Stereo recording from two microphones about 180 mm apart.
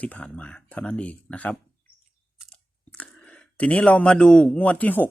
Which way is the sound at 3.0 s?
5° left (ahead or behind).